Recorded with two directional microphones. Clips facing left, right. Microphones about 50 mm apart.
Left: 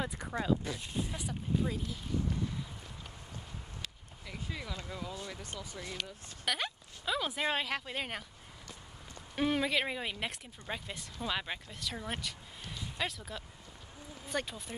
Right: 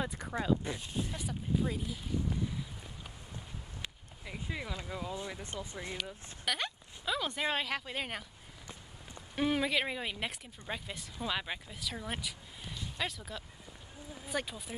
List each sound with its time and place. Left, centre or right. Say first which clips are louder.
0.3 s speech: even; centre
3.8 s speech: right 1 dB; centre
6.4 s speech: even; centre
9.3 s speech: even; centre